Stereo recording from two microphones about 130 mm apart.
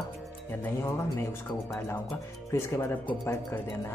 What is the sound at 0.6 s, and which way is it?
Speech, 20° left (ahead or behind).